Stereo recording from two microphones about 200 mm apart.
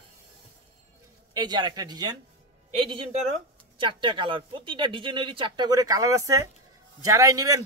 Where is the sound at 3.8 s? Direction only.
25° right (ahead or behind).